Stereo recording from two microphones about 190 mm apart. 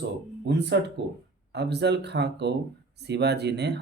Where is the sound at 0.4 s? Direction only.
65° right (ahead or behind).